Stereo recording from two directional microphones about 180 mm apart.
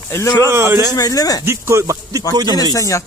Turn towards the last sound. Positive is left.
turn(degrees=20)  # may be behind; listen again after turning